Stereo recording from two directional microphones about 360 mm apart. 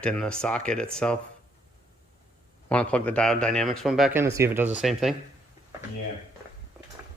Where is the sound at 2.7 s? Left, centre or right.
Centre.